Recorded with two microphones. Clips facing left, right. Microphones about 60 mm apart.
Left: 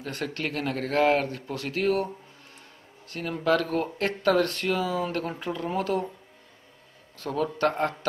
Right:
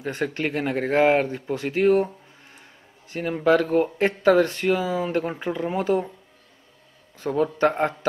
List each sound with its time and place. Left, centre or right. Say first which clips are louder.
0.0 s speech: right 5 dB; centre
3.1 s speech: right 5 dB; centre
7.2 s speech: right 5 dB; centre